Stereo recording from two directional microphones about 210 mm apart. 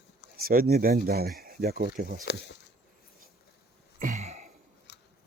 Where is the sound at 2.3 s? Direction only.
50° left (ahead or behind).